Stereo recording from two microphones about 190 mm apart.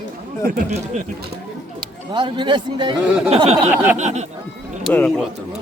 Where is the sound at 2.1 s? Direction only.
25° right (ahead or behind).